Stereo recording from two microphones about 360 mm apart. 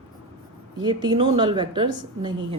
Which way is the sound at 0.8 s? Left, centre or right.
Centre.